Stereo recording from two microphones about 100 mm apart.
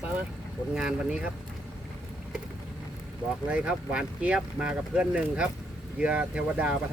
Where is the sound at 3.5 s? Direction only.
10° right (ahead or behind).